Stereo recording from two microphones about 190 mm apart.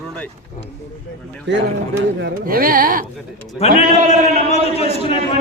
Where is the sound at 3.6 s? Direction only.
35° left (ahead or behind).